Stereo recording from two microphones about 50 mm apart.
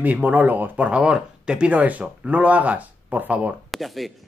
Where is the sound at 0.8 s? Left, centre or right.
Right.